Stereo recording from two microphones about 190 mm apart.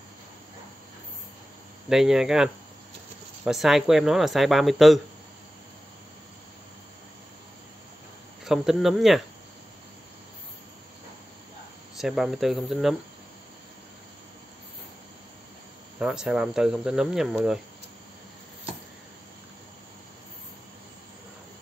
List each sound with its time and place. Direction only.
1.9 s speech: centre (ahead or behind)
8.5 s speech: centre (ahead or behind)
12.0 s speech: centre (ahead or behind)
16.0 s speech: 5° right (ahead or behind)